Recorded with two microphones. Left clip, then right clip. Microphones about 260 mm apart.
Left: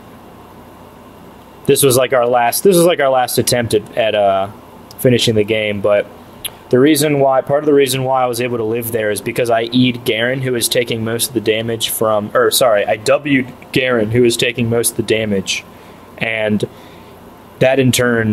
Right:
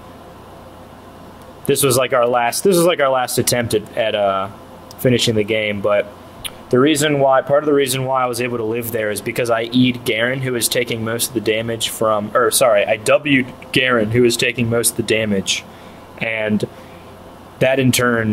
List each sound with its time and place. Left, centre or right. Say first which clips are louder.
1.7 s speech: left 4 dB; left